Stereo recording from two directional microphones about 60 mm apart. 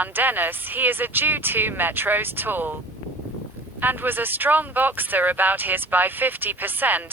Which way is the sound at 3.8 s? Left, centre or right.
Right.